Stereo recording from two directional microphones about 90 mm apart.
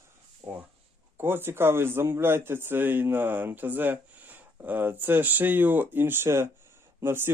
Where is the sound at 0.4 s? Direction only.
55° right (ahead or behind).